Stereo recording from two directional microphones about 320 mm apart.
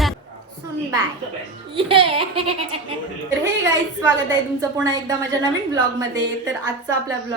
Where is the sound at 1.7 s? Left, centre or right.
Centre.